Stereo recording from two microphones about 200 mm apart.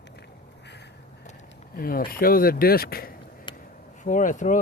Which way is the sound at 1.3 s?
45° left (ahead or behind).